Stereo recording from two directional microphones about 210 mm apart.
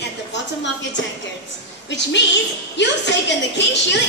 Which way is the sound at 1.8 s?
55° left (ahead or behind).